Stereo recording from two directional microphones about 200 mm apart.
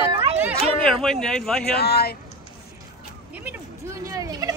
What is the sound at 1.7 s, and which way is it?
Speech, 50° left (ahead or behind).